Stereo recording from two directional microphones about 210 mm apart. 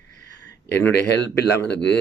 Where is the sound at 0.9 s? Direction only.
55° left (ahead or behind).